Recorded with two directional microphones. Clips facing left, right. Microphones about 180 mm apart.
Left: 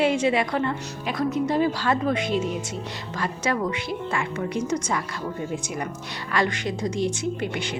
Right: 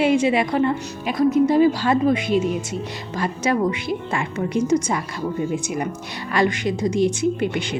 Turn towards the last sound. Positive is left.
turn(degrees=-20)  # may be behind; listen again after turning